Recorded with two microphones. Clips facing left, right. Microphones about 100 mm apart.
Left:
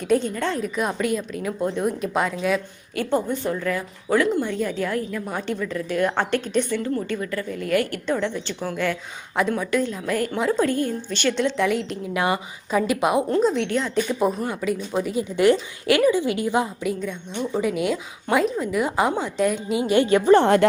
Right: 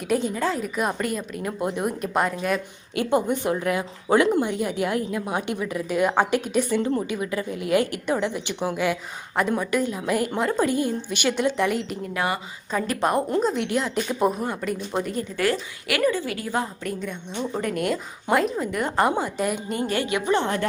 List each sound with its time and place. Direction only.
0.0 s a woman's voice: 5° right (ahead or behind)
2.9 s a woman's voice: 15° right (ahead or behind)
6.7 s a woman's voice: 20° right (ahead or behind); by 11.9 s 5° right (ahead or behind)
12.1 s a woman's voice: 20° left (ahead or behind)
12.7 s a woman's voice: 5° left (ahead or behind)
15.4 s a woman's voice: 20° left (ahead or behind)
16.9 s a woman's voice: centre (ahead or behind)
20.1 s a woman's voice: 35° left (ahead or behind)
20.3 s speech: 65° left (ahead or behind)